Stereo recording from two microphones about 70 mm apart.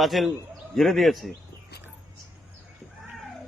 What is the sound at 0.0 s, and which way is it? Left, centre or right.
Speech, centre.